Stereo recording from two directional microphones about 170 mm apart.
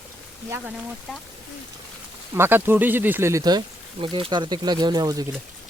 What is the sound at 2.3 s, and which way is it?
Speech, 15° right (ahead or behind).